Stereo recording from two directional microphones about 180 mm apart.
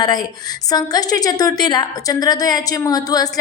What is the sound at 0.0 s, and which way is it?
A woman's voice, 20° left (ahead or behind).